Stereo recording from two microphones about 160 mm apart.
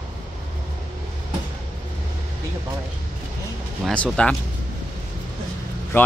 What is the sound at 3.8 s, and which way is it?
Speech, centre (ahead or behind).